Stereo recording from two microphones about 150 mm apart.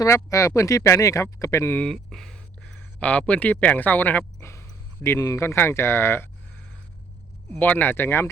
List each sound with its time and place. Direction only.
0.0 s speech: 20° left (ahead or behind)
1.8 s speech: centre (ahead or behind)
7.6 s speech: 10° left (ahead or behind)